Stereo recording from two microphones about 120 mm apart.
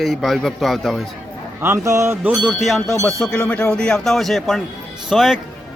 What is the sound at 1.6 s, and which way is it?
Music, 20° right (ahead or behind).